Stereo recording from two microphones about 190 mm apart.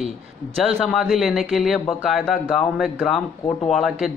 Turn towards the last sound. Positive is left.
turn(degrees=0)  # may be behind; listen again after turning